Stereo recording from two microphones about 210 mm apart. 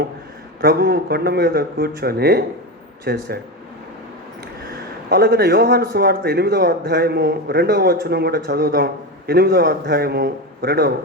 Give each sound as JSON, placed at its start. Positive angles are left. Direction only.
{"t": 0.6, "sound": "a man's voice", "side_deg": -50}
{"t": 4.7, "sound": "a man's voice", "side_deg": -50}